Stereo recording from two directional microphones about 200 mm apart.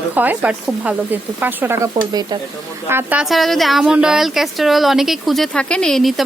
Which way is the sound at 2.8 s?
10° right (ahead or behind).